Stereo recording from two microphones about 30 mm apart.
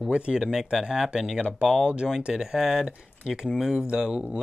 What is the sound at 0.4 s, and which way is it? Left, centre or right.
Speech, centre.